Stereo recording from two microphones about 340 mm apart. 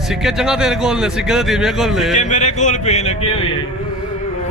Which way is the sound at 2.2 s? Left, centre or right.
Left.